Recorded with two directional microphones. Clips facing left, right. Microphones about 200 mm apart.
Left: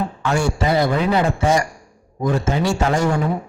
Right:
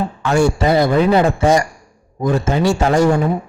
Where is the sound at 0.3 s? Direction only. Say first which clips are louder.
Right 5 dB; 40° right (ahead or behind).